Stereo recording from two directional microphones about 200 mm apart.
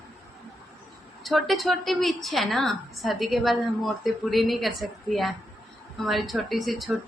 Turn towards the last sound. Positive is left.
turn(degrees=0)  # may be behind; listen again after turning